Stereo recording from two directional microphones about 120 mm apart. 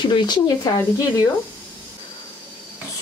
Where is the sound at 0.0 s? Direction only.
40° left (ahead or behind).